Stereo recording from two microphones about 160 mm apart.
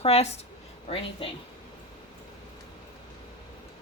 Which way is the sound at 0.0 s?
40° left (ahead or behind).